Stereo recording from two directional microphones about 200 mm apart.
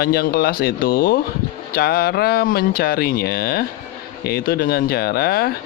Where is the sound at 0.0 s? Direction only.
50° left (ahead or behind).